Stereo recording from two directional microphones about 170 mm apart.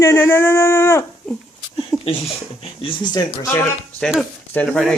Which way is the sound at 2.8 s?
30° left (ahead or behind).